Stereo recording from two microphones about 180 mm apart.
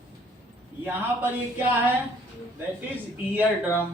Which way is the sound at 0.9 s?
10° right (ahead or behind).